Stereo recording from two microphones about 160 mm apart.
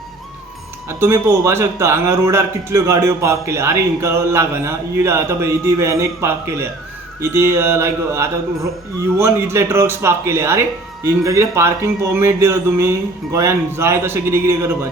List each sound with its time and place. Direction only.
0.9 s a man's voice: 15° right (ahead or behind)